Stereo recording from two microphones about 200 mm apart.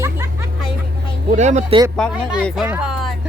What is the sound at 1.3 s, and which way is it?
Speech, 35° right (ahead or behind).